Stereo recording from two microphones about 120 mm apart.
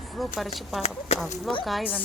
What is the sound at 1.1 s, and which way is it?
Speech, 65° left (ahead or behind).